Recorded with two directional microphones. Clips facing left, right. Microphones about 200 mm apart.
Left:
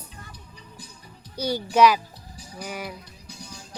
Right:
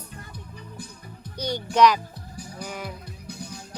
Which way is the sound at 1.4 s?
5° left (ahead or behind).